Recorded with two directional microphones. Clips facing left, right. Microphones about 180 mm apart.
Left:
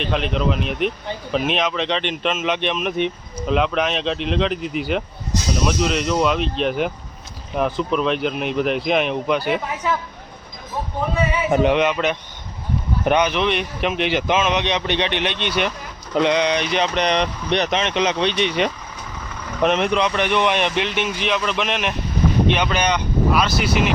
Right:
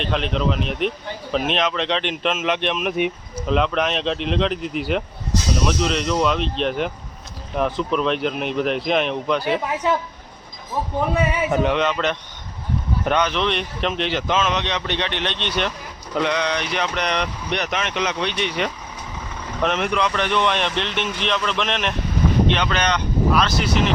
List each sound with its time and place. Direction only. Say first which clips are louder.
0.0 s speech: left 1 dB; 5° left (ahead or behind)
11.6 s speech: left 3 dB; 15° left (ahead or behind)
16.1 s speech: left 4 dB; 20° left (ahead or behind)